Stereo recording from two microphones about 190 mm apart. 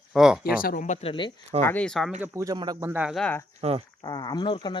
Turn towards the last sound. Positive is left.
turn(degrees=25)  # may be behind; listen again after turning